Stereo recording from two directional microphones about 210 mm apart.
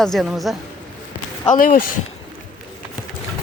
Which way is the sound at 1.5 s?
40° left (ahead or behind).